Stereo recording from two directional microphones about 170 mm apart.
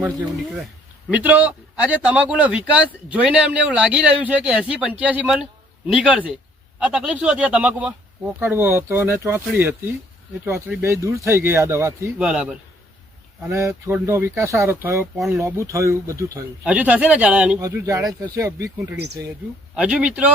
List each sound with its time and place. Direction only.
1.1 s speech: 10° right (ahead or behind)
12.2 s a man's voice: 5° right (ahead or behind)
13.4 s speech: 20° right (ahead or behind)
17.6 s speech: 20° right (ahead or behind)
19.7 s speech: 5° right (ahead or behind)